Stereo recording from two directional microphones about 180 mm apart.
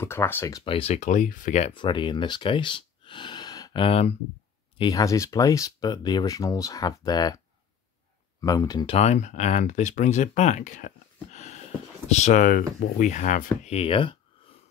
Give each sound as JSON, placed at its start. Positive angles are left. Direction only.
{"t": 0.0, "sound": "speech", "side_deg": 15}
{"t": 0.7, "sound": "speech", "side_deg": 30}
{"t": 8.8, "sound": "speech", "side_deg": 35}